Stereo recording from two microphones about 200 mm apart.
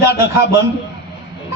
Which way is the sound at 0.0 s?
15° right (ahead or behind).